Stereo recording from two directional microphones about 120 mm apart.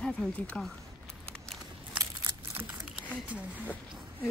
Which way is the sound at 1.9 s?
40° right (ahead or behind).